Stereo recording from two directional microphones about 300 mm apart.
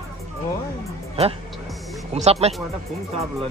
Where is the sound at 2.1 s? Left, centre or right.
Right.